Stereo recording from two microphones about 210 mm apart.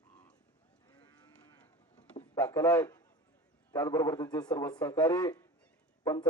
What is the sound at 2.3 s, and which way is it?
A man's voice, 10° left (ahead or behind).